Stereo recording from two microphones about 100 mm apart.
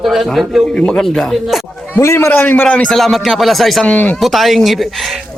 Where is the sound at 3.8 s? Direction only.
15° left (ahead or behind).